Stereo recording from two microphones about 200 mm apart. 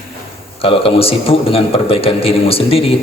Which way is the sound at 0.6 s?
25° left (ahead or behind).